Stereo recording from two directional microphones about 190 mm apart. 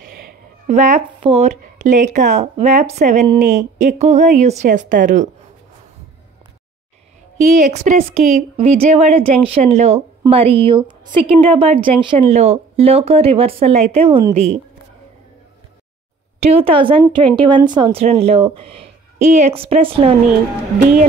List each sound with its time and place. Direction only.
0.7 s a woman's voice: 35° right (ahead or behind)
7.4 s a woman's voice: 35° right (ahead or behind)
16.3 s a woman's voice: 30° right (ahead or behind)
20.8 s speech: 45° right (ahead or behind)